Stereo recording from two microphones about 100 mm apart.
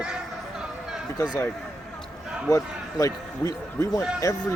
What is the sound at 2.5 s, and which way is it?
Speech, 30° left (ahead or behind).